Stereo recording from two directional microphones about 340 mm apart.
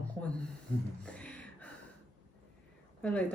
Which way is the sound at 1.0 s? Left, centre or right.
Centre.